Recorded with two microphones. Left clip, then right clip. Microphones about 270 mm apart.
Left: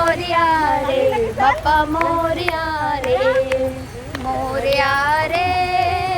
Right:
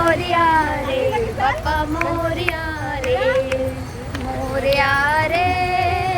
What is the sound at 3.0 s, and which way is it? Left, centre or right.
Speech, centre.